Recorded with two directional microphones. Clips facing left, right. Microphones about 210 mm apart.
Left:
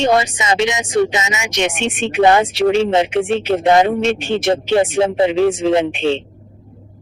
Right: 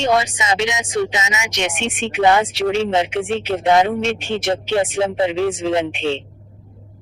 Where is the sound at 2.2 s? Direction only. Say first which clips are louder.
Left 3 dB; 45° left (ahead or behind).